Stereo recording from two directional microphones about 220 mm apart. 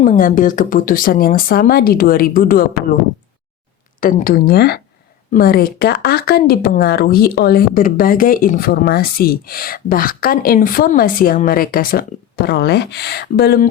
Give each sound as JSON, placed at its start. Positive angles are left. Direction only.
{"t": 0.0, "sound": "speech", "side_deg": 35}
{"t": 4.0, "sound": "speech", "side_deg": 40}